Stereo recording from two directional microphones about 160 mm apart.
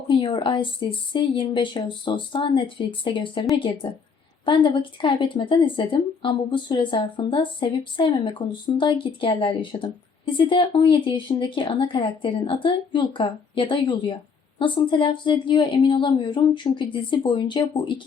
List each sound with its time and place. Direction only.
0.1 s speech: 30° left (ahead or behind)